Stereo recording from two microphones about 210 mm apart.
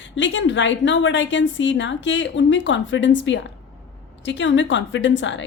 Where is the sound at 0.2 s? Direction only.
60° left (ahead or behind).